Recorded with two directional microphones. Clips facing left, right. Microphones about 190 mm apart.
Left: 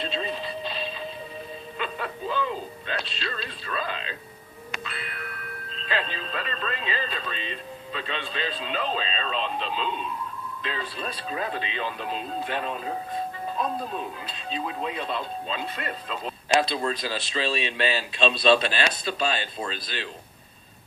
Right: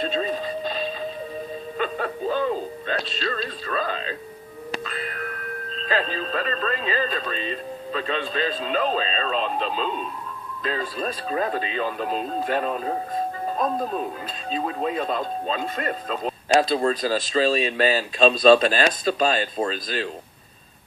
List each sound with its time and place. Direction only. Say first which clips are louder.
0.0 s music: right 5 dB; 45° right (ahead or behind)
1.8 s speech: right 6 dB; 45° right (ahead or behind)